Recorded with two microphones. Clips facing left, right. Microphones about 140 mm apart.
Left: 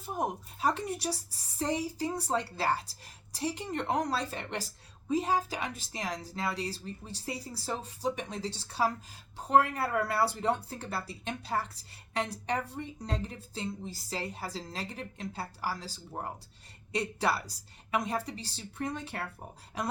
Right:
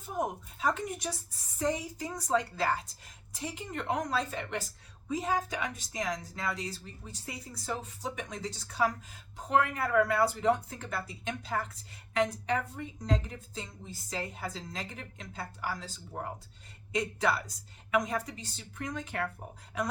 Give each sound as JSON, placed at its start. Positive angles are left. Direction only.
{"t": 0.0, "sound": "speech", "side_deg": 35}